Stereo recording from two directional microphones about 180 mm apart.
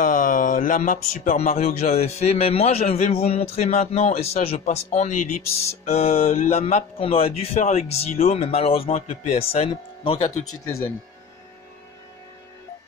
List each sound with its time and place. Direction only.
0.0 s speech: 45° left (ahead or behind); by 10.1 s 30° left (ahead or behind)